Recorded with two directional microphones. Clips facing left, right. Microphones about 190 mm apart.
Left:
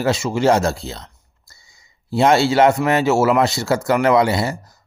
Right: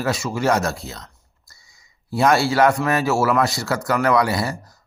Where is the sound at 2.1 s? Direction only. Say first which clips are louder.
Left 3 dB; 25° left (ahead or behind).